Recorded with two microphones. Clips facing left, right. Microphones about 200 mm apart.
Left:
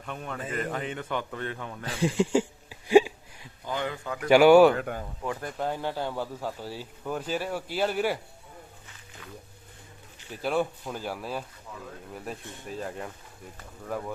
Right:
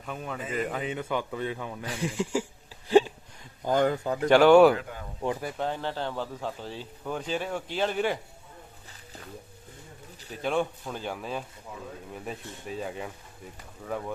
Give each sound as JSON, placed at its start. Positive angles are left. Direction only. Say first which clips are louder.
{"t": 0.0, "sound": "a man's voice", "louder": "even", "side_deg": 0}
{"t": 2.0, "sound": "a sound", "louder": "left 6 dB", "side_deg": 30}
{"t": 2.8, "sound": "a sound", "louder": "left 2 dB", "side_deg": 10}
{"t": 3.6, "sound": "speech", "louder": "right 8 dB", "side_deg": -45}
{"t": 4.3, "sound": "speech", "louder": "left 1 dB", "side_deg": 10}
{"t": 10.4, "sound": "a man's voice", "louder": "even", "side_deg": 5}